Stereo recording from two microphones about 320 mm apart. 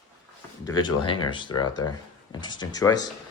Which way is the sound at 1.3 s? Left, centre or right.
Centre.